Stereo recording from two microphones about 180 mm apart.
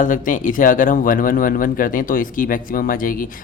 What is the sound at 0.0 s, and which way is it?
Speech, 45° left (ahead or behind).